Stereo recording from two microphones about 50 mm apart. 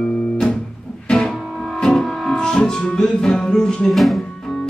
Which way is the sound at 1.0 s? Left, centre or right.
Centre.